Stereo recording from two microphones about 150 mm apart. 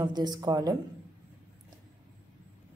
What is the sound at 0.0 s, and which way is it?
Speech, 30° right (ahead or behind).